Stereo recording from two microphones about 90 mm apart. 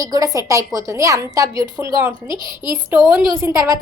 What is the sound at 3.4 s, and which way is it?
Speech, 35° right (ahead or behind).